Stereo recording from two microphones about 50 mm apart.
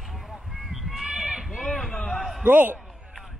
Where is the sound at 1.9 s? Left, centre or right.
Left.